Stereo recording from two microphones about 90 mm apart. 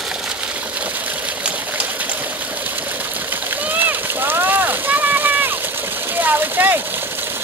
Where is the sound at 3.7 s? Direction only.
20° right (ahead or behind).